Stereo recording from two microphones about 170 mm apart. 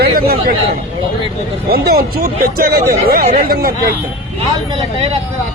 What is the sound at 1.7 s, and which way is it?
Speech, 65° right (ahead or behind).